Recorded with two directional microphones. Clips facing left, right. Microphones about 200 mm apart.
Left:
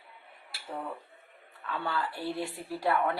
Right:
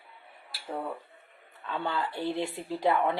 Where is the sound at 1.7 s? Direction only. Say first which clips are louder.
Right 2 dB; 20° right (ahead or behind).